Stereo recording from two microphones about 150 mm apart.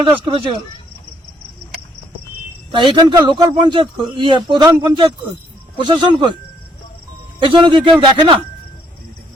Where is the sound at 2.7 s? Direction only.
35° right (ahead or behind).